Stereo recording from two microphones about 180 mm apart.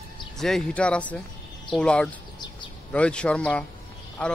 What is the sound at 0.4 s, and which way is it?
Speech, centre (ahead or behind).